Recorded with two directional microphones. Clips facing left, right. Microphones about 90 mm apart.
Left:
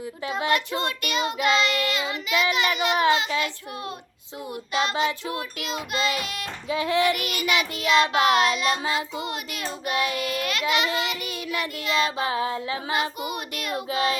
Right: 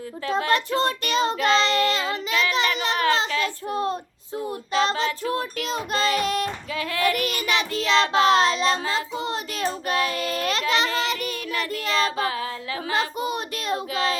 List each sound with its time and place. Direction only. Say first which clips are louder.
0.3 s a child's voice: right 3 dB; 10° left (ahead or behind)
0.8 s child singing: right 4 dB; 35° right (ahead or behind)
2.6 s a sound: even; 35° right (ahead or behind)
3.4 s child singing: right 6 dB; 35° right (ahead or behind)
4.9 s child singing: even; 15° left (ahead or behind)
5.3 s child singing: right 4 dB; 35° right (ahead or behind)
6.7 s child singing: left 5 dB; 20° left (ahead or behind)
7.0 s child singing: even; 40° right (ahead or behind)
7.9 s child singing: even; 15° left (ahead or behind)
8.2 s child singing: right 2 dB; 30° right (ahead or behind)
12.1 s child singing: left 1 dB; 25° left (ahead or behind)
12.9 s child singing: right 3 dB; 30° right (ahead or behind)